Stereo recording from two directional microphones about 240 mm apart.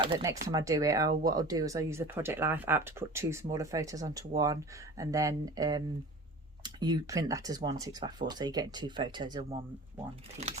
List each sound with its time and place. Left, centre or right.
0.0 s speech: centre